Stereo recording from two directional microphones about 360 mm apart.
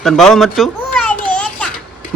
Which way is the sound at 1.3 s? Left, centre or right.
Centre.